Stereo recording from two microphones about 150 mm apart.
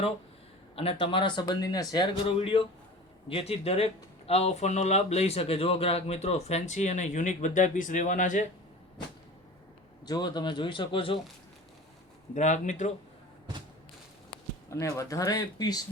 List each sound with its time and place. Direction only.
0.8 s speech: 40° left (ahead or behind); by 8.4 s 55° left (ahead or behind)
10.1 s speech: 30° left (ahead or behind)
12.3 s speech: 55° left (ahead or behind)
14.7 s speech: 20° left (ahead or behind)